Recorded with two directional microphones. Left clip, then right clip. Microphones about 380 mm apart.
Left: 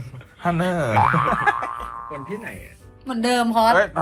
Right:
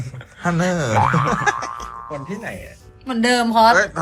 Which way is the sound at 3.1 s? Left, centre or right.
Right.